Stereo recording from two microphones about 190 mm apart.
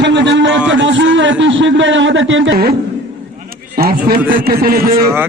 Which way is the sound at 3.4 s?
50° right (ahead or behind).